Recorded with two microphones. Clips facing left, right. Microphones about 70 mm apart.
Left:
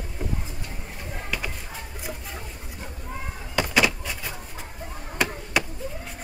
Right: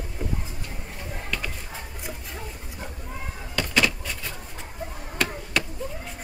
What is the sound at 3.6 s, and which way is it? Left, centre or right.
Vehicle, centre.